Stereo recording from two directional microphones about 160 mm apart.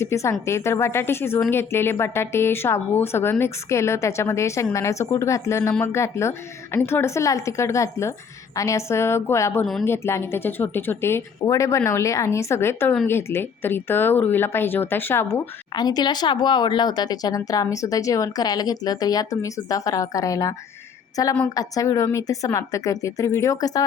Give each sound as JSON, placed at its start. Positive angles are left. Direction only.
{"t": 0.0, "sound": "a woman's voice", "side_deg": 15}
{"t": 15.7, "sound": "speech", "side_deg": 25}